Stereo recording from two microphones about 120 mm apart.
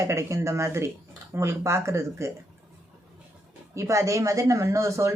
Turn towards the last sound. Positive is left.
turn(degrees=-25)  # may be behind; listen again after turning